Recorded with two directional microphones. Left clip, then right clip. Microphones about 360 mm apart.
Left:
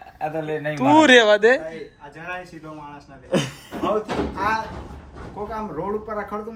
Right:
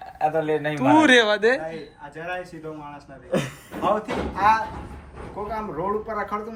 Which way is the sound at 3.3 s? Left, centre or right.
Left.